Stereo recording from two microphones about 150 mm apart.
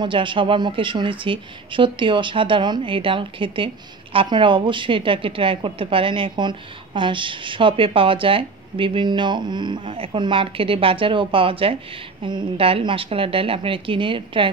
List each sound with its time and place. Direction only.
0.0 s speech: 35° right (ahead or behind)